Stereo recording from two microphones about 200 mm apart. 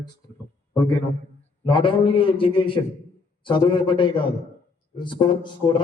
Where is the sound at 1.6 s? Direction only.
25° left (ahead or behind).